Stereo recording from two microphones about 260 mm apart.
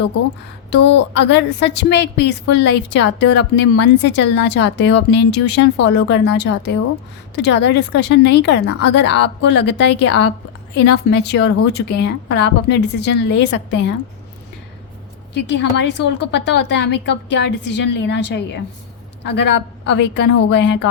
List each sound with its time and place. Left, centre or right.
0.7 s a woman's voice: left
15.3 s a woman's voice: left